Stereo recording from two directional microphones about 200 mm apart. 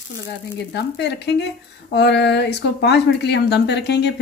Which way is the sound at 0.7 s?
55° left (ahead or behind).